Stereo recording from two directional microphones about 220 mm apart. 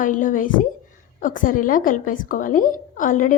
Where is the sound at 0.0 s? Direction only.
35° left (ahead or behind).